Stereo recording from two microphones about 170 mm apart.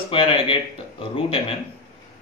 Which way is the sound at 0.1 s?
30° left (ahead or behind).